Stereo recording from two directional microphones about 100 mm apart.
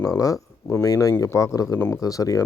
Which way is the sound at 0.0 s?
35° left (ahead or behind).